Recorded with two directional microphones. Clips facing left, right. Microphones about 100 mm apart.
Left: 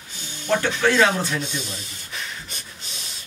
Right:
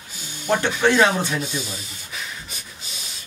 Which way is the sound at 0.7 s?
10° right (ahead or behind).